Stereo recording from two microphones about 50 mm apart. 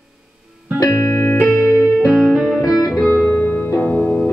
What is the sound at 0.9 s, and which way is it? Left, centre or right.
Music, left.